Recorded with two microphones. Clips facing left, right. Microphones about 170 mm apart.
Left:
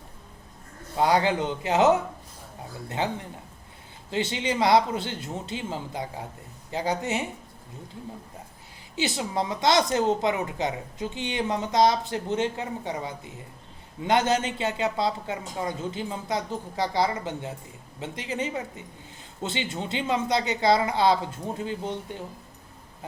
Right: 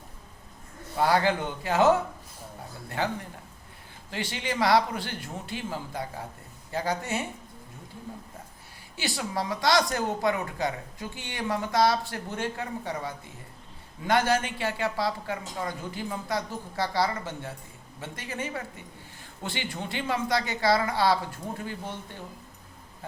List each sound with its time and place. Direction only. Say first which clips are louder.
0.9 s a woman's voice: left 2 dB; 20° left (ahead or behind)
3.0 s a woman's voice: left 1 dB; 20° left (ahead or behind)
9.0 s a woman's voice: left 4 dB; 20° left (ahead or behind)